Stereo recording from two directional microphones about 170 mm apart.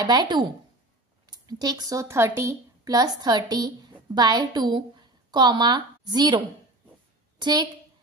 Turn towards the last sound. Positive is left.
turn(degrees=-25)  # may be behind; listen again after turning